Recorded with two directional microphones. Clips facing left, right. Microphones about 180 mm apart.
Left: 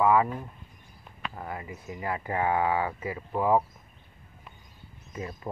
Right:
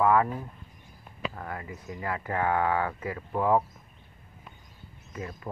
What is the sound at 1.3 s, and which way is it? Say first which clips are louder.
Speech: even; 15° left (ahead or behind).